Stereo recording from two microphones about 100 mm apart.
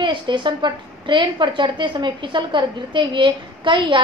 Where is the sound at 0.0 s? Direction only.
50° right (ahead or behind).